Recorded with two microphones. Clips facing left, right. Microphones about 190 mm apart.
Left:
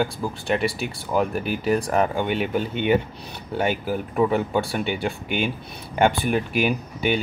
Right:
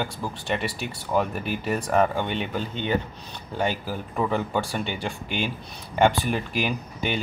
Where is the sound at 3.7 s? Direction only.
60° left (ahead or behind).